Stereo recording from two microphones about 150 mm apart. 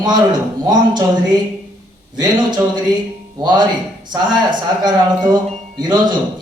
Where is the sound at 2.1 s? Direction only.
30° right (ahead or behind).